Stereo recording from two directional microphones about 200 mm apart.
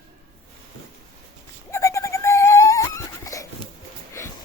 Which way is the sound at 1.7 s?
15° left (ahead or behind).